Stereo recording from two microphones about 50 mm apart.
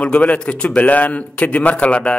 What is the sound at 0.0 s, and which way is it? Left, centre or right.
A man's voice, left.